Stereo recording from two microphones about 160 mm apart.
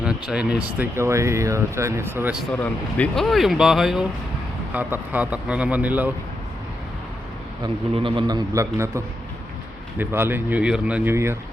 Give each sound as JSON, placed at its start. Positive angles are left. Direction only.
{"t": 0.0, "sound": "speech", "side_deg": -5}
{"t": 2.5, "sound": "speech", "side_deg": 10}
{"t": 7.6, "sound": "a man's voice", "side_deg": -30}